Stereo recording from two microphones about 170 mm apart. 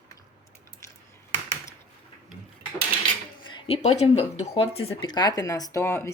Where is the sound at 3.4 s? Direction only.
30° left (ahead or behind).